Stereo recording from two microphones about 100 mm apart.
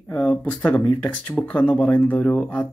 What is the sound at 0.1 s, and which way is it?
Speech, 15° left (ahead or behind).